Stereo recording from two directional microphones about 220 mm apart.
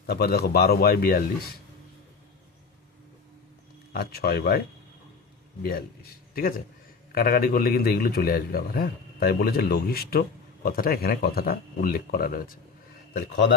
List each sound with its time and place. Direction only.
0.0 s a man's voice: 45° left (ahead or behind)
3.9 s a man's voice: 45° left (ahead or behind)
5.6 s a man's voice: 45° left (ahead or behind)